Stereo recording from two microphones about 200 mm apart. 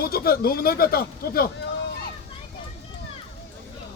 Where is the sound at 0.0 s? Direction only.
50° left (ahead or behind).